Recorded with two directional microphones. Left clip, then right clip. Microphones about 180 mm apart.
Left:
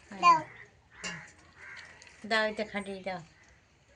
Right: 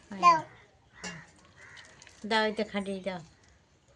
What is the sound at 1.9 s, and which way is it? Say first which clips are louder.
A woman's voice: right 1 dB; 65° right (ahead or behind).